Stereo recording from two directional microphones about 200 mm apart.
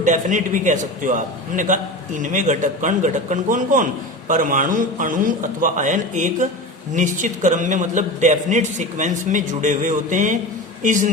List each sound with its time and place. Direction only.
0.0 s a man's voice: 40° right (ahead or behind)